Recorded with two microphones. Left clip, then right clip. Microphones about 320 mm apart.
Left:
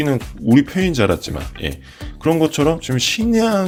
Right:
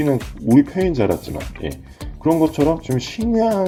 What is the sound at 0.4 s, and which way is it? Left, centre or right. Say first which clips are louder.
Speech: even; left.